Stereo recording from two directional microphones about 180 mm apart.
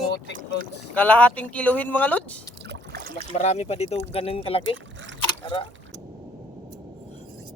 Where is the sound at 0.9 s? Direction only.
10° left (ahead or behind).